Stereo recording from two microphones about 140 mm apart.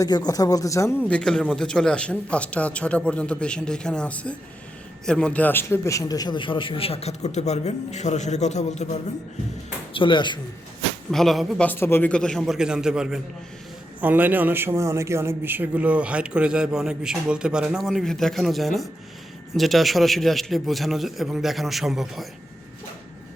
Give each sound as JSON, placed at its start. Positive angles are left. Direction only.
{"t": 0.0, "sound": "a man's voice", "side_deg": 30}
{"t": 9.9, "sound": "speech", "side_deg": 35}
{"t": 11.1, "sound": "a man's voice", "side_deg": 0}
{"t": 11.6, "sound": "a man's voice", "side_deg": 15}